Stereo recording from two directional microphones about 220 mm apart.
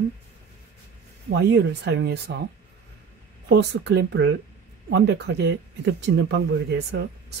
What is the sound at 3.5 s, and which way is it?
Speech, 50° right (ahead or behind).